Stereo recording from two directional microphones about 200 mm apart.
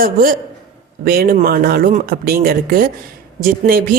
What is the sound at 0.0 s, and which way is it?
Speech, 45° right (ahead or behind).